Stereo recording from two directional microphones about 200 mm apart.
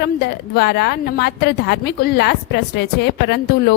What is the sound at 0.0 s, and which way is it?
A woman's voice, 55° left (ahead or behind).